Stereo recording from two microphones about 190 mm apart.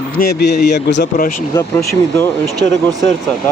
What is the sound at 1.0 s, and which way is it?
Speech, 50° left (ahead or behind).